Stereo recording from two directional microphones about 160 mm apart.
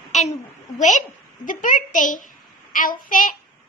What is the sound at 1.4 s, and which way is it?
A woman's voice, 55° left (ahead or behind).